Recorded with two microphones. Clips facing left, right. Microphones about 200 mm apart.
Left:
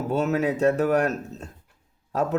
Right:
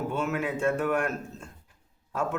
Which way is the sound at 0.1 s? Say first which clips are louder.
Left 6 dB; 40° left (ahead or behind).